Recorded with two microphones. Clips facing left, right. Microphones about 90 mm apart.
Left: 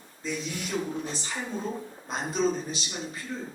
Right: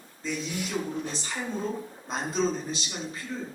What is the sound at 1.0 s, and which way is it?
Speech, 15° left (ahead or behind).